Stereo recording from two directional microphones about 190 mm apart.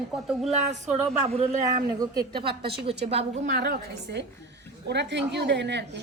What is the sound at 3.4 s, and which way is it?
A woman's voice, 60° right (ahead or behind).